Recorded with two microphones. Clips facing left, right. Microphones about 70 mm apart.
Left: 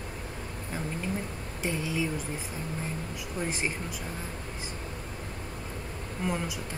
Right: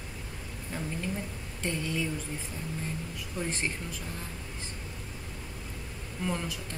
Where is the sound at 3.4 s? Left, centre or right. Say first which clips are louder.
Left 1 dB; centre.